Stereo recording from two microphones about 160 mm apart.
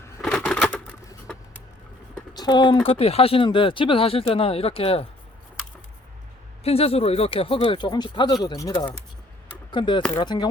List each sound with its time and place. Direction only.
0.2 s typewriter: 5° left (ahead or behind)
2.3 s speech: 25° left (ahead or behind)
6.7 s speech: 40° left (ahead or behind); by 8.8 s 20° left (ahead or behind)
9.7 s speech: 30° left (ahead or behind)